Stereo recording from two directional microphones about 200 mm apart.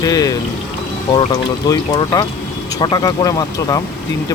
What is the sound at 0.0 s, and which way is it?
Pour, 20° left (ahead or behind).